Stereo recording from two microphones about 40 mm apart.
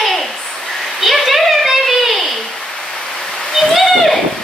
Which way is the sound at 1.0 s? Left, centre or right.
Centre.